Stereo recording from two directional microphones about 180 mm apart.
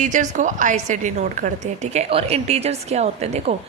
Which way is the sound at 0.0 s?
45° right (ahead or behind).